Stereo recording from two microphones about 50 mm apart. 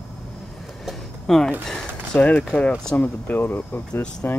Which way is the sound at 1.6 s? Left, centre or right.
Centre.